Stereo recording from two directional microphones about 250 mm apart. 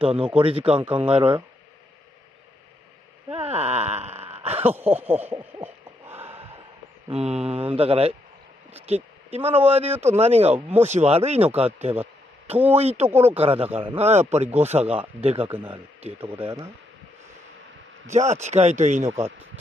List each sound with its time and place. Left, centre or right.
0.3 s speech: right
0.7 s speech: centre
1.1 s speech: right
3.3 s speech: right
4.3 s a sound: right
4.6 s owl: centre
7.1 s speech: right
13.1 s speech: centre
13.4 s speech: right
15.4 s speech: centre
16.0 s speech: right
18.1 s speech: right